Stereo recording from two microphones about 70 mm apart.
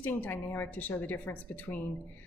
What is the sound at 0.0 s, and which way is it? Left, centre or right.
Speech, left.